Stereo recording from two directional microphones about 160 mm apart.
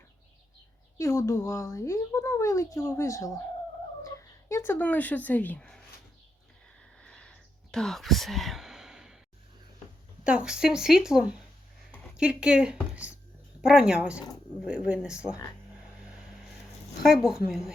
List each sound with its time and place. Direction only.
0.9 s speech: 20° left (ahead or behind)
7.0 s whispering: 5° left (ahead or behind)
10.2 s a woman's voice: 5° right (ahead or behind)
17.0 s a woman's voice: 5° right (ahead or behind)